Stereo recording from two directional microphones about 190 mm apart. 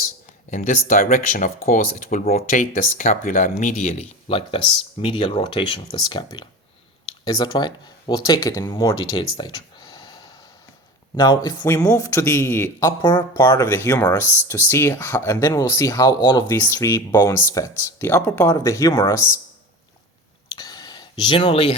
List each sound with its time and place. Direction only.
0.5 s speech: 40° left (ahead or behind); by 10.2 s 20° left (ahead or behind)
11.2 s speech: 20° left (ahead or behind)
20.6 s a sound: 20° left (ahead or behind)